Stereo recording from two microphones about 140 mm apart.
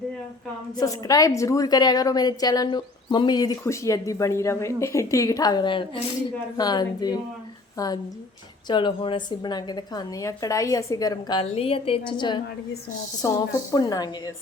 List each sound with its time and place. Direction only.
0.8 s a woman's voice: 25° left (ahead or behind)
11.5 s a woman's voice: 45° left (ahead or behind); by 14.3 s 25° left (ahead or behind)